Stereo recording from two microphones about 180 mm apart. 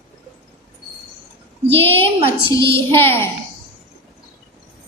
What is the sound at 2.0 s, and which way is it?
Speech, 30° right (ahead or behind).